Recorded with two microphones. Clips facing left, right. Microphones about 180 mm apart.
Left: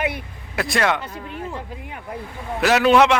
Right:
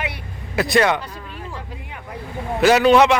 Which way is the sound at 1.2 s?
20° left (ahead or behind).